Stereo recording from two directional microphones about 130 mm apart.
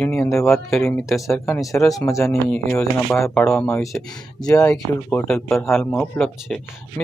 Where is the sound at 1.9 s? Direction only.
25° left (ahead or behind).